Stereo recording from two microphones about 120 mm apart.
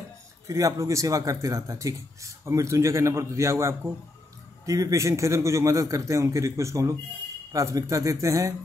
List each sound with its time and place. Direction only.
0.5 s speech: 30° right (ahead or behind)